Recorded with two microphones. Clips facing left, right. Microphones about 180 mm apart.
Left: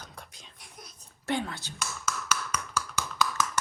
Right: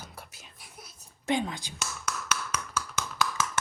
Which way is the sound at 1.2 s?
15° right (ahead or behind).